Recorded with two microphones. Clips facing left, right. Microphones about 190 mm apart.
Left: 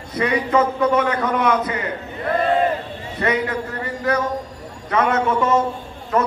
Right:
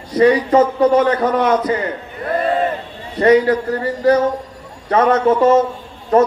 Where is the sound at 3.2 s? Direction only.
35° right (ahead or behind).